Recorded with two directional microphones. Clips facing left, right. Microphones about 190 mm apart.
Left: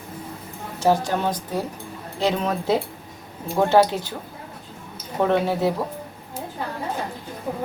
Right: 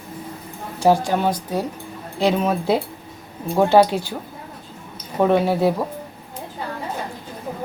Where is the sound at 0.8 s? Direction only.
10° right (ahead or behind).